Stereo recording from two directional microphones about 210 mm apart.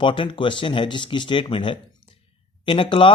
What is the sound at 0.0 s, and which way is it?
Speech, 25° left (ahead or behind).